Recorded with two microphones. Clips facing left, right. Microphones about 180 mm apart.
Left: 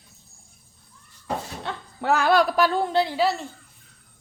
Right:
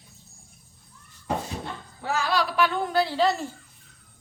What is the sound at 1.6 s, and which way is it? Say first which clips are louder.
Speech: left 6 dB; 60° left (ahead or behind).